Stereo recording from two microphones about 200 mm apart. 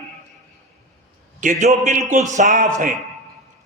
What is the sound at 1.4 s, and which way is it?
A man's voice, 35° right (ahead or behind).